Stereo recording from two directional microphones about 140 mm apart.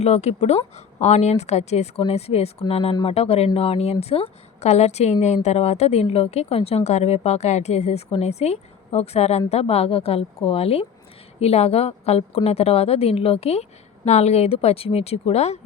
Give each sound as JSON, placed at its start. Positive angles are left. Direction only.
{"t": 0.0, "sound": "a woman's voice", "side_deg": 50}